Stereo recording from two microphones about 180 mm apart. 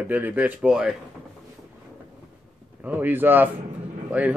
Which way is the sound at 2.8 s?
10° right (ahead or behind).